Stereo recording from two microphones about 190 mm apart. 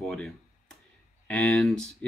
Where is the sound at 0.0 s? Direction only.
5° left (ahead or behind).